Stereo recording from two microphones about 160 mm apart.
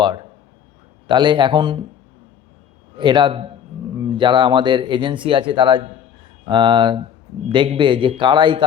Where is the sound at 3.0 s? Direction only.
30° right (ahead or behind).